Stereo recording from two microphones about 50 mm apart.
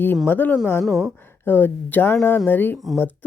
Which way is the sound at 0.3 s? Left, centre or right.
Left.